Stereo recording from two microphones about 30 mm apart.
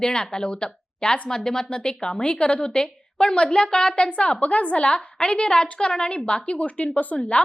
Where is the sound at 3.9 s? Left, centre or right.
Left.